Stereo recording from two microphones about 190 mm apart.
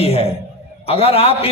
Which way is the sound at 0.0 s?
30° left (ahead or behind).